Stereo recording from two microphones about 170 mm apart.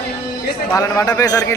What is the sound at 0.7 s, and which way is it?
Speech, 20° left (ahead or behind).